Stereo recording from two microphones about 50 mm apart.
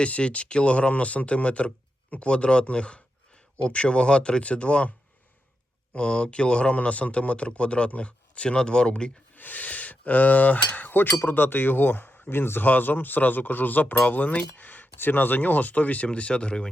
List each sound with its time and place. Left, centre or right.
0.0 s speech: left
5.9 s speech: left
9.3 s speech: left; by 16.6 s centre